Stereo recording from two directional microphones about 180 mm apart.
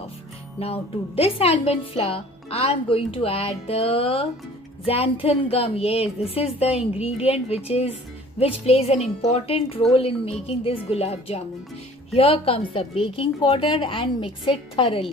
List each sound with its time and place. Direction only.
0.6 s a woman's voice: 35° left (ahead or behind)